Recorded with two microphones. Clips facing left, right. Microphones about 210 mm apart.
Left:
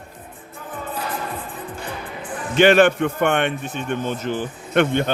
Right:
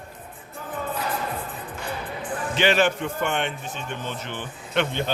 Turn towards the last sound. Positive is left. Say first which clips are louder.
# left 7 dB
turn(degrees=50)  # may be behind; listen again after turning